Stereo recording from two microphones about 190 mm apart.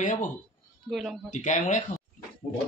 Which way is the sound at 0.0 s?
45° left (ahead or behind).